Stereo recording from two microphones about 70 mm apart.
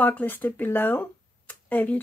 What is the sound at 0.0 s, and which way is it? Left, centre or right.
Speech, left.